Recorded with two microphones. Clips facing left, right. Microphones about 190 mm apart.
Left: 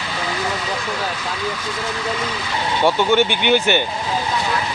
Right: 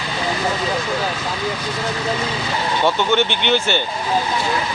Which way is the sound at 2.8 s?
10° left (ahead or behind).